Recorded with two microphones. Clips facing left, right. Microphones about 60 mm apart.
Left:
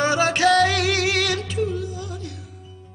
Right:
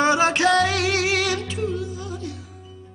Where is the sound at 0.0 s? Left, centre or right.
Centre.